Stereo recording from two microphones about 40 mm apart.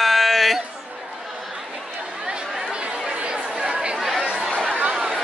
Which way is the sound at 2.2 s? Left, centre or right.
Right.